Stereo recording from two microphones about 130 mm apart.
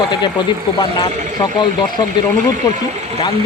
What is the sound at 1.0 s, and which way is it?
Speech, 35° left (ahead or behind).